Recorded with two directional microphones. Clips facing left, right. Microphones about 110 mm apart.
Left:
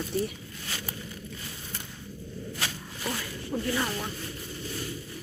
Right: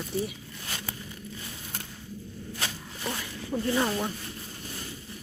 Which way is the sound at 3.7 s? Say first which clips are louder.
Right 5 dB; 25° right (ahead or behind).